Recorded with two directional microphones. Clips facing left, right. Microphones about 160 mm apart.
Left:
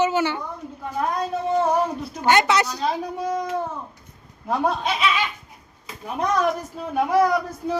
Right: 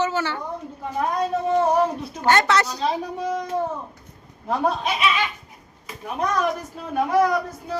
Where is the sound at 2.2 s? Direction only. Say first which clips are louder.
Even; 15° left (ahead or behind).